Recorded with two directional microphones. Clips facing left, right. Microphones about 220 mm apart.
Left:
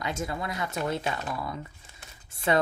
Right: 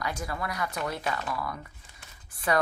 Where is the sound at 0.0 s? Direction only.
25° left (ahead or behind).